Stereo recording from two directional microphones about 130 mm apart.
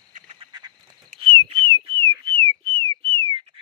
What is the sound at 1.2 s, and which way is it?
Whistling, 45° right (ahead or behind).